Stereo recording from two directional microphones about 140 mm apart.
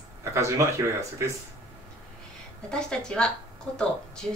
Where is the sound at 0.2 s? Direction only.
20° right (ahead or behind).